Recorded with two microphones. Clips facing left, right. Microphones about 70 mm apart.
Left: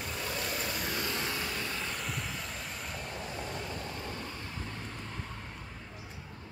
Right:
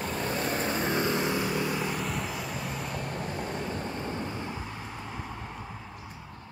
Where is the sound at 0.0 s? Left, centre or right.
Right; by 2.0 s centre.